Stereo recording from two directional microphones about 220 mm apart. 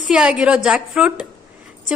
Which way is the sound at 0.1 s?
5° right (ahead or behind).